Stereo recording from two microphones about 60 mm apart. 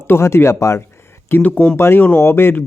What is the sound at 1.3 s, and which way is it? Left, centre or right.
Speech, left.